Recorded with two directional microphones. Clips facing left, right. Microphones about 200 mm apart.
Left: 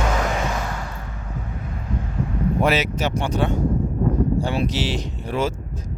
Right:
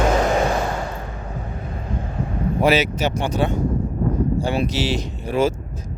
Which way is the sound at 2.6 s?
5° right (ahead or behind).